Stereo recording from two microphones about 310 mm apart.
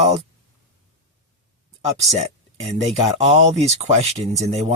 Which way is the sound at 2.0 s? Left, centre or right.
Right.